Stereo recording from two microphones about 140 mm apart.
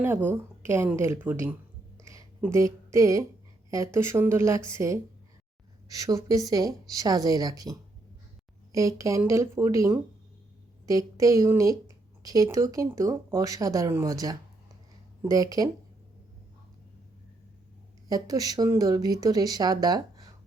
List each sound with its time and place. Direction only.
0.0 s speech: 15° right (ahead or behind)
18.1 s speech: 25° right (ahead or behind)